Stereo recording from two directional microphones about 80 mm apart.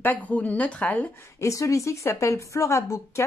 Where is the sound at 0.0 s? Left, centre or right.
Centre.